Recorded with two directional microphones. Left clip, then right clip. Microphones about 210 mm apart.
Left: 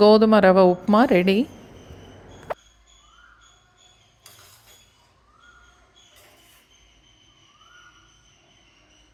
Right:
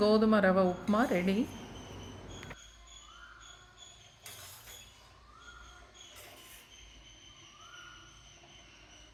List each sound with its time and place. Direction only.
0.0 s speech: 30° left (ahead or behind)